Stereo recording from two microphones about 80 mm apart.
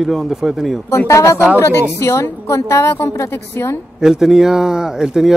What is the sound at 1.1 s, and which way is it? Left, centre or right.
A woman's voice, left.